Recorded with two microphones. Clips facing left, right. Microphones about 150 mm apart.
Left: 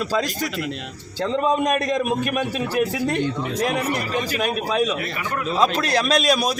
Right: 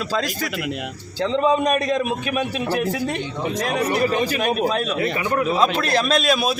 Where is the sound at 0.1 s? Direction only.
5° right (ahead or behind).